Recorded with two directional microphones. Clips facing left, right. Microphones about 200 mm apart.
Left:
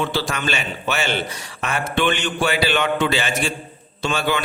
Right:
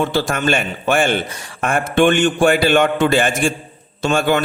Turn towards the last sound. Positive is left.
turn(degrees=-50)  # may be behind; listen again after turning